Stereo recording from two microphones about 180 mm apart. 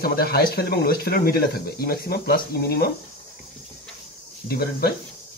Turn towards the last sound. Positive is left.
turn(degrees=60)  # may be behind; listen again after turning